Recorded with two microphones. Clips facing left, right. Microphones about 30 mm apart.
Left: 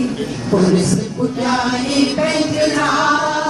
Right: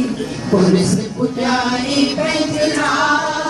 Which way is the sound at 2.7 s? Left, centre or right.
Centre.